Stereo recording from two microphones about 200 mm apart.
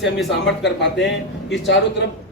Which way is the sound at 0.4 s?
60° left (ahead or behind).